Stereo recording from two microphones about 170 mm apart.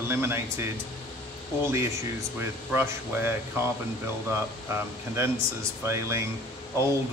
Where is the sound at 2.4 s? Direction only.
15° right (ahead or behind).